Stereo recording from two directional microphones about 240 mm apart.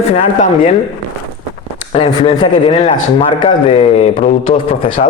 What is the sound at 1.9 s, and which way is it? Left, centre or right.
A man's voice, left.